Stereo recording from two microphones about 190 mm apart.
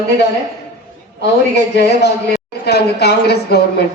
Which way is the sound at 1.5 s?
60° left (ahead or behind).